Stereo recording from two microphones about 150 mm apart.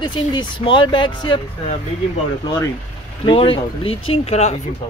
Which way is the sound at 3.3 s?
35° left (ahead or behind).